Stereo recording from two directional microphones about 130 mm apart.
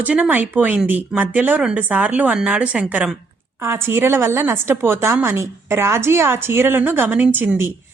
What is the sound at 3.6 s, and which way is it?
A woman's voice, 20° right (ahead or behind).